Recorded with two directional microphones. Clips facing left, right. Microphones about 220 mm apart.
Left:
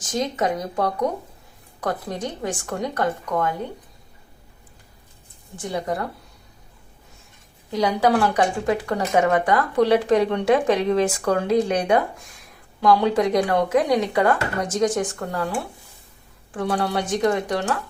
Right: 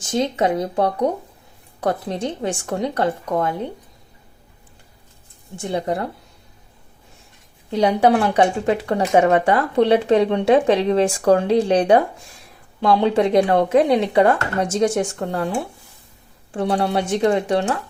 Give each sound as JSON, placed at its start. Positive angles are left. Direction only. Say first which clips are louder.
{"t": 0.0, "sound": "speech", "louder": "right 4 dB", "side_deg": -25}
{"t": 5.5, "sound": "speech", "louder": "right 3 dB", "side_deg": -25}
{"t": 7.7, "sound": "speech", "louder": "right 3 dB", "side_deg": -25}